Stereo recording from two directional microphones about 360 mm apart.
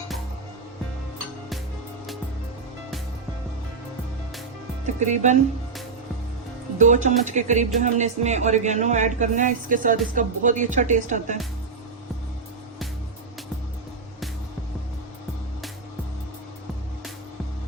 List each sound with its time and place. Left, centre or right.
4.9 s speech: centre
6.7 s speech: centre